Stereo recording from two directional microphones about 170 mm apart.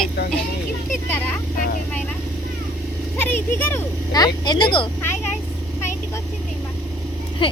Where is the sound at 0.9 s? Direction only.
10° left (ahead or behind).